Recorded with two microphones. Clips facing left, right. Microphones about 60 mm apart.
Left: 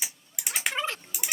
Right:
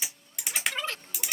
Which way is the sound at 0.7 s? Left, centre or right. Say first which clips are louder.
Left 3 dB; left.